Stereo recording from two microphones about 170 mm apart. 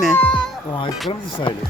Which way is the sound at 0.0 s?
5° left (ahead or behind).